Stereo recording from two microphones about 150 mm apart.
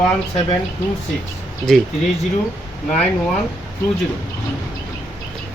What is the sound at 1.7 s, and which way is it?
Speech, 5° left (ahead or behind).